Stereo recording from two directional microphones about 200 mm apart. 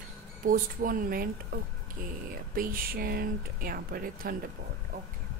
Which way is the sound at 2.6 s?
45° right (ahead or behind).